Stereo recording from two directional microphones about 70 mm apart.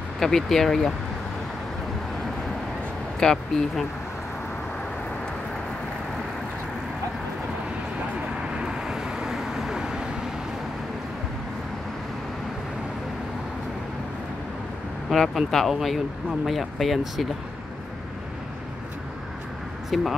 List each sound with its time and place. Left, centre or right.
0.2 s speech: centre
3.2 s speech: centre
8.4 s vehicle: centre
15.0 s speech: centre
19.9 s speech: centre